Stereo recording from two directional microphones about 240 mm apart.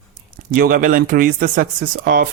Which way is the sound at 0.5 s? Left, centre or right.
Right.